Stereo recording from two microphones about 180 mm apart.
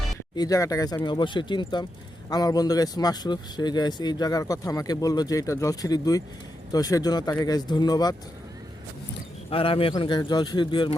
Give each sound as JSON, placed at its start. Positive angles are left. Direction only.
{"t": 0.3, "sound": "speech", "side_deg": 20}
{"t": 9.5, "sound": "speech", "side_deg": 30}